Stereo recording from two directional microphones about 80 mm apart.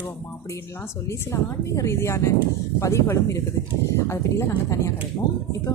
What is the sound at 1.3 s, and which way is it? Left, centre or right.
Speech, left.